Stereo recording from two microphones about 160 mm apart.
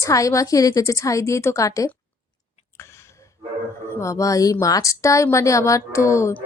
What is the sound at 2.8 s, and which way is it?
Gasp, 15° left (ahead or behind).